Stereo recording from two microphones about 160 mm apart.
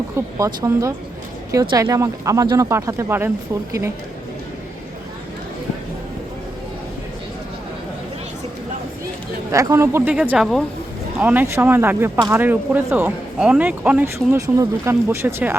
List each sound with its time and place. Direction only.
0.3 s speech: 20° right (ahead or behind)
9.5 s speech: 20° right (ahead or behind)
14.3 s speech: 20° right (ahead or behind)